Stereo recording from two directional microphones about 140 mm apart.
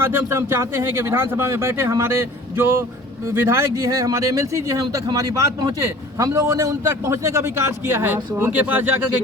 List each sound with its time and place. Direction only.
0.0 s a man's voice: 15° right (ahead or behind)